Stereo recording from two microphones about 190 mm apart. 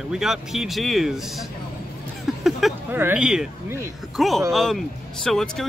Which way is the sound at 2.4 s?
Centre (ahead or behind).